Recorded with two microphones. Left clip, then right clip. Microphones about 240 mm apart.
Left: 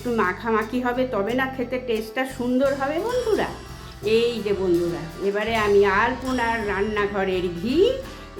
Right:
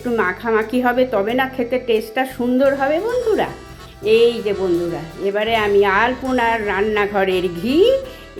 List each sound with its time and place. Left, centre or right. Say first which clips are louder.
0.2 s a woman's voice: right 4 dB; centre
3.0 s a woman's voice: right 5 dB; centre
4.5 s speech: right 3 dB; centre
5.2 s a woman's voice: right 5 dB; centre